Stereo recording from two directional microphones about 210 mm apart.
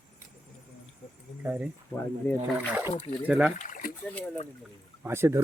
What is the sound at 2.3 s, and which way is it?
Speech, 10° left (ahead or behind).